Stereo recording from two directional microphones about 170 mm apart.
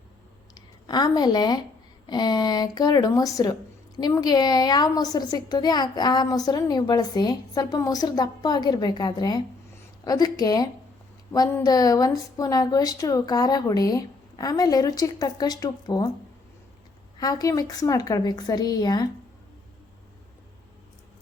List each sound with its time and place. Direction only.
0.9 s a woman's voice: 25° left (ahead or behind)
17.2 s a woman's voice: 20° left (ahead or behind)